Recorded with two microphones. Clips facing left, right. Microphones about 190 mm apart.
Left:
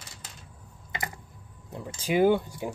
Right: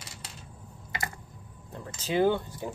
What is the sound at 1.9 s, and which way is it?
Speech, 10° left (ahead or behind).